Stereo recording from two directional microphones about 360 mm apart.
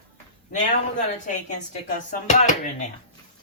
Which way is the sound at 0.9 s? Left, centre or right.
Centre.